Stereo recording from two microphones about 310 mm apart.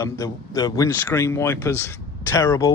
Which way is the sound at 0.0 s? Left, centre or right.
Centre.